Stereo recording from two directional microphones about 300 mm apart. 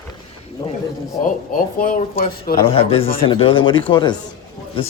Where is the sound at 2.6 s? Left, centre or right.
Centre.